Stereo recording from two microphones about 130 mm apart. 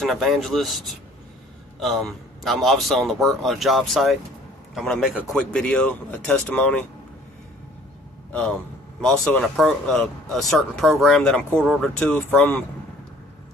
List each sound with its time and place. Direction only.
0.0 s a man's voice: centre (ahead or behind)
8.3 s a man's voice: 5° left (ahead or behind)